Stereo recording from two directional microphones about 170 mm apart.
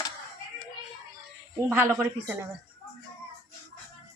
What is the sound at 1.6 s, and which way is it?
Speech, 15° right (ahead or behind).